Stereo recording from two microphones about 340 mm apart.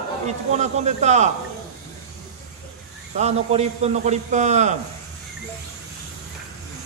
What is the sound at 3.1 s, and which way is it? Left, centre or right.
A man's voice, centre.